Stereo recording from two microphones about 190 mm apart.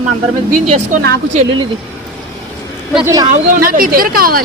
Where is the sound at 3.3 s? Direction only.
45° right (ahead or behind).